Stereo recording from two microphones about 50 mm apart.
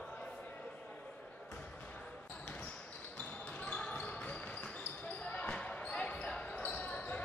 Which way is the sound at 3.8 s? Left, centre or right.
Left.